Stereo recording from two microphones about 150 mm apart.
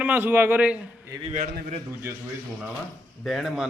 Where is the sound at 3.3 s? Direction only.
Centre (ahead or behind).